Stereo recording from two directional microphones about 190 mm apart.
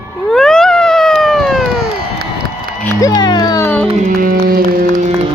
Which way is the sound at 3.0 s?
20° left (ahead or behind).